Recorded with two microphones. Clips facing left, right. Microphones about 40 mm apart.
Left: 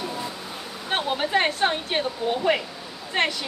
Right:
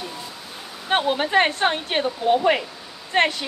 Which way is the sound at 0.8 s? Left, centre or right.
Centre.